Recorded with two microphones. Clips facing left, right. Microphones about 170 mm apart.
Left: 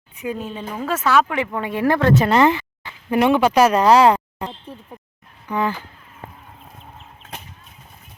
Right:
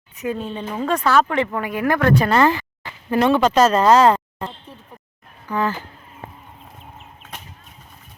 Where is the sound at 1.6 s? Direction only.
25° left (ahead or behind).